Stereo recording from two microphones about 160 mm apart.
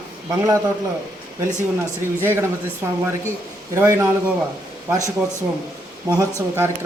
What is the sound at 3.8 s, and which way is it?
A man's voice, 15° right (ahead or behind).